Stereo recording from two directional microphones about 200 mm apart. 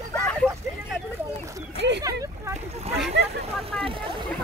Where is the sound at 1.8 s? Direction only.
60° right (ahead or behind).